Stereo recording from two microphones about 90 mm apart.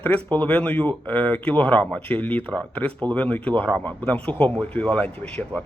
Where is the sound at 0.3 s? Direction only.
15° left (ahead or behind).